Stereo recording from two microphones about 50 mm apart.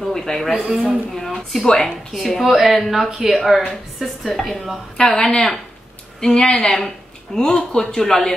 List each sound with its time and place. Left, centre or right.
0.0 s a man's voice: centre
0.5 s a man's voice: centre
1.2 s a woman's voice: centre
4.9 s speech: centre